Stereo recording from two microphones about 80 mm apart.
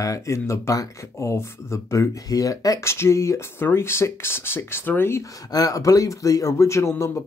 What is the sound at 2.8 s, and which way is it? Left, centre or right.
Speech, left.